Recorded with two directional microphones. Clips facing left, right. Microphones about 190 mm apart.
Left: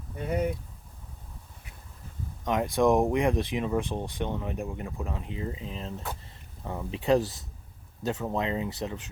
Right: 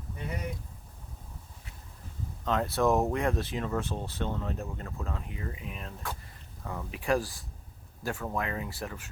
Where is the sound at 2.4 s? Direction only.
15° left (ahead or behind).